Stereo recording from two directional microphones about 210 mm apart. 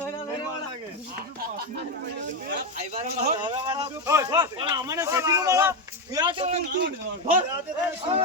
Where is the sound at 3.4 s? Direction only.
20° right (ahead or behind).